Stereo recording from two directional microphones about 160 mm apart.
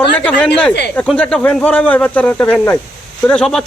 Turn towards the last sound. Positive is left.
turn(degrees=5)  # may be behind; listen again after turning